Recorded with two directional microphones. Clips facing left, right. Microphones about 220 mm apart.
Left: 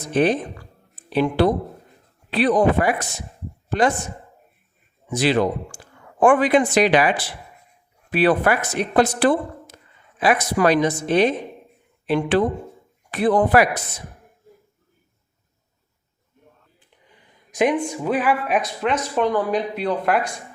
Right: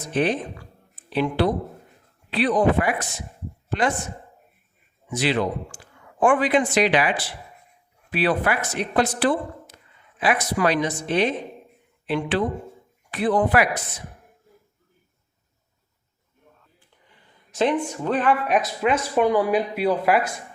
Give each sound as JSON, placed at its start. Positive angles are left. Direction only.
{"t": 0.1, "sound": "a woman's voice", "side_deg": 40}
{"t": 5.1, "sound": "a woman's voice", "side_deg": 40}
{"t": 8.1, "sound": "a woman's voice", "side_deg": 50}
{"t": 17.2, "sound": "a woman's voice", "side_deg": 15}